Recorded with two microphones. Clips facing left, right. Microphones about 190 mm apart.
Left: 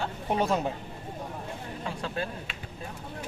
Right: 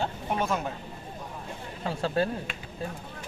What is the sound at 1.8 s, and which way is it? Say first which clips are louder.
Speech: right 7 dB; 35° right (ahead or behind).